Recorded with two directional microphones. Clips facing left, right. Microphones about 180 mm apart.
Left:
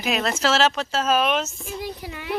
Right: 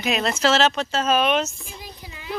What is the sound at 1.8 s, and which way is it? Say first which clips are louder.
Speech: left 3 dB; 65° left (ahead or behind).